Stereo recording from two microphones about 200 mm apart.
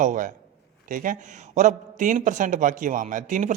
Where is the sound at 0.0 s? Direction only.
40° right (ahead or behind).